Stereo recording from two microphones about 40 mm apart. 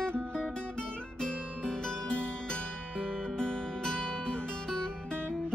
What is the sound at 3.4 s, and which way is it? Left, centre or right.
Music, left.